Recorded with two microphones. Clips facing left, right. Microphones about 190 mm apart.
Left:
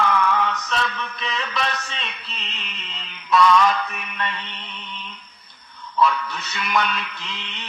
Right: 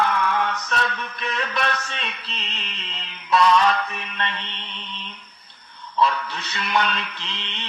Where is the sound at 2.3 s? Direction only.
35° right (ahead or behind).